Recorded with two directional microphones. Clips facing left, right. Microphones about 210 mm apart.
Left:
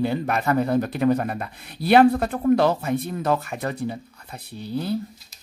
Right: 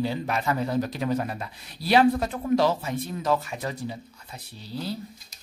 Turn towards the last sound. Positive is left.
turn(degrees=55)  # may be behind; listen again after turning